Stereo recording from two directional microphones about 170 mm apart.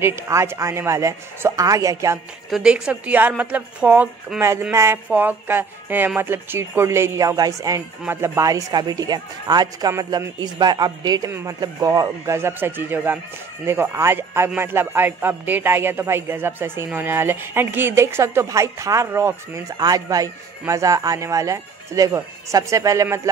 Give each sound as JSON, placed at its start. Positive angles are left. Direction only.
{"t": 0.0, "sound": "a man's voice", "side_deg": -15}
{"t": 2.5, "sound": "a man's voice", "side_deg": -5}